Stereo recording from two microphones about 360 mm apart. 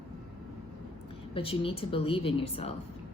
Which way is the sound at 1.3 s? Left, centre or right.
Centre.